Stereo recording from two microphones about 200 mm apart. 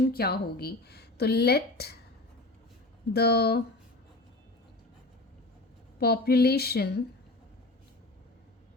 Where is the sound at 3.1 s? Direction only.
55° left (ahead or behind).